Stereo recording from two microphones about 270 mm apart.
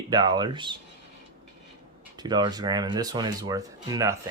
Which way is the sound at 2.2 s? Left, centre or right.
Centre.